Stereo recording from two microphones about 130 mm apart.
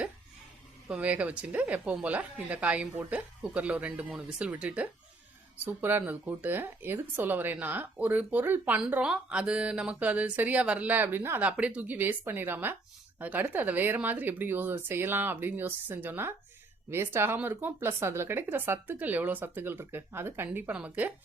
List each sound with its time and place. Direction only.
0.9 s speech: 10° right (ahead or behind)